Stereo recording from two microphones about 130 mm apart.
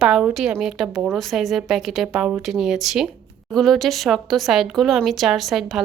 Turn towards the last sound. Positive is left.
turn(degrees=0)  # may be behind; listen again after turning